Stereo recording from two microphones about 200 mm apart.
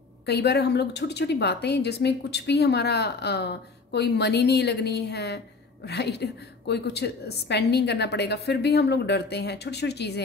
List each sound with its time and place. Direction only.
0.3 s a woman's voice: 55° left (ahead or behind)